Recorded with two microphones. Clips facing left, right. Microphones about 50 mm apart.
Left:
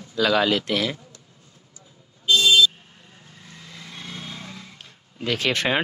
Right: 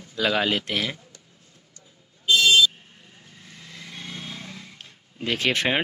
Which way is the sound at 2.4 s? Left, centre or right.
Centre.